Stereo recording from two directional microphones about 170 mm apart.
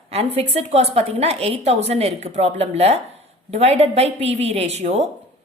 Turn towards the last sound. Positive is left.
turn(degrees=-40)  # may be behind; listen again after turning